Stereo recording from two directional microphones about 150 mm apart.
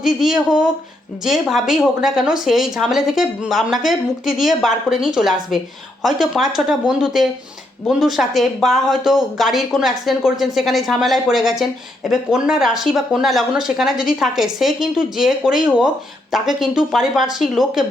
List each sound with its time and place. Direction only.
0.0 s speech: 5° right (ahead or behind)